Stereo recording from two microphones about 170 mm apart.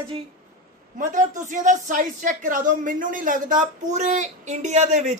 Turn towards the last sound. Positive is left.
turn(degrees=-45)  # may be behind; listen again after turning